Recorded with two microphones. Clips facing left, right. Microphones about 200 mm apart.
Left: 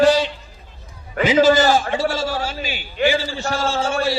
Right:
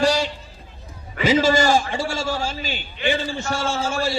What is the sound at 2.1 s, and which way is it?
Speech, 25° right (ahead or behind).